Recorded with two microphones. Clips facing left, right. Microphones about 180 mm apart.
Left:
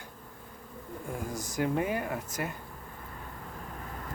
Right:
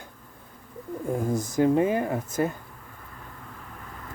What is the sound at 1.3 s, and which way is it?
Speech, 50° right (ahead or behind).